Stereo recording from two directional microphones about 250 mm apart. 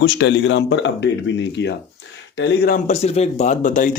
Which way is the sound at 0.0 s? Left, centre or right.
Left.